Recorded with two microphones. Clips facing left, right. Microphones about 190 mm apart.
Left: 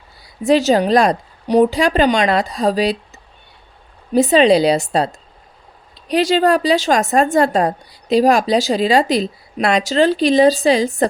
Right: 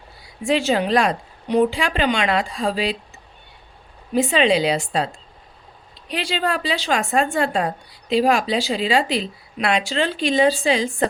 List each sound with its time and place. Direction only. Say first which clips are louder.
0.2 s a woman's voice: left 6 dB; 40° left (ahead or behind)
4.1 s a woman's voice: left 6 dB; 40° left (ahead or behind)